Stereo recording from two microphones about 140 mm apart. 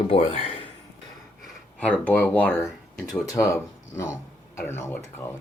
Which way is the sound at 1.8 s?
10° left (ahead or behind).